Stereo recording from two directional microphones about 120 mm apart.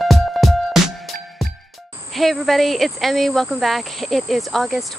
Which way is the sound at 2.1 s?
Centre (ahead or behind).